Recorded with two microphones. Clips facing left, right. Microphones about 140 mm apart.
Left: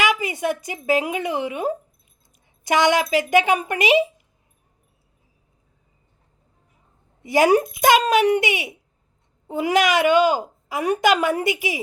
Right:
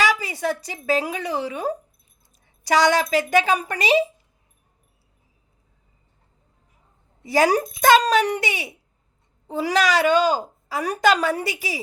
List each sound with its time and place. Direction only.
0.1 s speech: 20° left (ahead or behind)
7.3 s speech: 15° left (ahead or behind)